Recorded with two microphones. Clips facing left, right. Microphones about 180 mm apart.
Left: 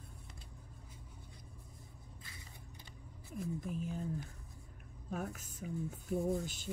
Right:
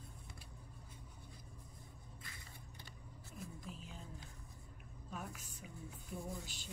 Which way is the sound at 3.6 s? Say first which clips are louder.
Left 11 dB; 50° left (ahead or behind).